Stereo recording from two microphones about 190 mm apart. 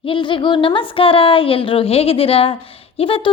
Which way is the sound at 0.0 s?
25° left (ahead or behind).